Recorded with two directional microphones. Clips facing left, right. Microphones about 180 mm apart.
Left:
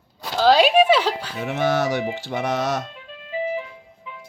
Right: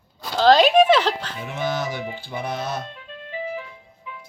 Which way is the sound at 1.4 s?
70° left (ahead or behind).